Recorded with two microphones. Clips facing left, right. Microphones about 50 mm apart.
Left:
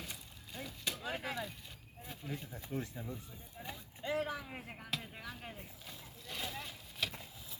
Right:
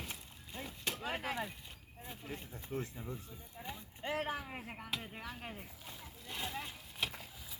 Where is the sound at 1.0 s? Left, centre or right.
Right.